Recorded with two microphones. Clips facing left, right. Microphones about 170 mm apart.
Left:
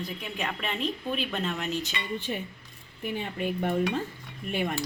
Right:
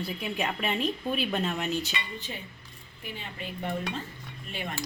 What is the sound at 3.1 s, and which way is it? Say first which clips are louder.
Speech: left 9 dB; 55° left (ahead or behind).